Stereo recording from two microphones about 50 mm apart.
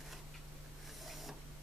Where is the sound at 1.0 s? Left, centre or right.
Centre.